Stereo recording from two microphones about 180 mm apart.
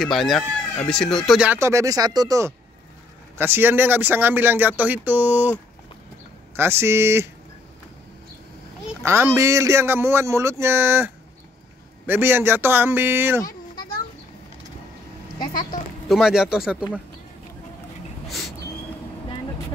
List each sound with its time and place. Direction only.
0.0 s speech: centre (ahead or behind); by 7.2 s 15° right (ahead or behind)
9.0 s speech: 15° right (ahead or behind)
12.1 s speech: 10° right (ahead or behind)
13.4 s children playing: 20° left (ahead or behind)
16.1 s speech: centre (ahead or behind)